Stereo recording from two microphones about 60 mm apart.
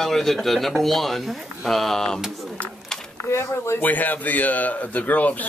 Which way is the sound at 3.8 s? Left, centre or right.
Left.